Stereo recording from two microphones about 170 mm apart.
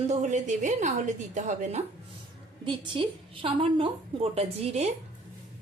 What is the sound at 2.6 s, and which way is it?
A woman's voice, 30° right (ahead or behind).